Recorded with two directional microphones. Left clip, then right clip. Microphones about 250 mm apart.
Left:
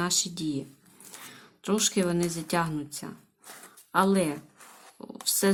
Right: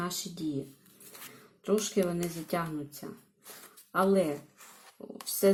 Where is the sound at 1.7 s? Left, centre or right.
Centre.